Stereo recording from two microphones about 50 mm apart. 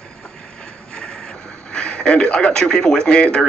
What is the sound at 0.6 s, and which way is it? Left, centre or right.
A man's voice, centre.